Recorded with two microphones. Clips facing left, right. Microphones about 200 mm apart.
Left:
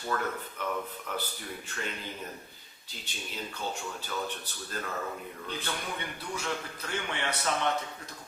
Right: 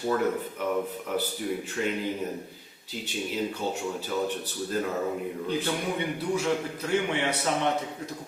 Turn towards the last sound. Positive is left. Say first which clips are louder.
# right 4 dB
turn(degrees=-10)  # may be behind; listen again after turning